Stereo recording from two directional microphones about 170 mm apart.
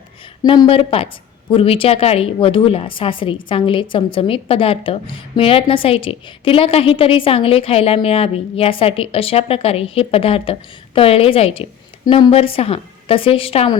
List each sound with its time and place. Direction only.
0.4 s a woman's voice: 30° left (ahead or behind)